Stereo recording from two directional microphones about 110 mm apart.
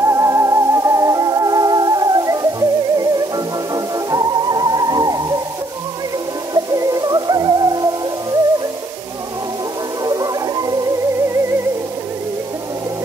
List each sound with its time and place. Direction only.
0.0 s music: 30° right (ahead or behind)
6.5 s music: 30° right (ahead or behind)
10.0 s music: 35° right (ahead or behind)